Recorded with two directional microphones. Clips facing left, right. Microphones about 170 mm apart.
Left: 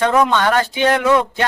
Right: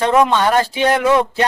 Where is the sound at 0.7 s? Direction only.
5° right (ahead or behind).